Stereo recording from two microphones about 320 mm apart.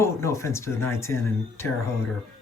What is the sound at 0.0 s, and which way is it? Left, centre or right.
Speech, centre.